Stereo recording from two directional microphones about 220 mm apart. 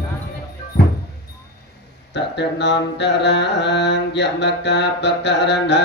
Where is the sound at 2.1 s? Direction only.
50° left (ahead or behind).